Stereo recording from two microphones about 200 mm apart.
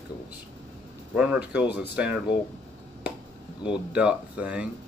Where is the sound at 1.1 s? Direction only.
5° right (ahead or behind).